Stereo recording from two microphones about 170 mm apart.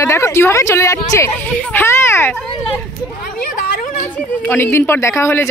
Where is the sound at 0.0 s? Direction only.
15° left (ahead or behind).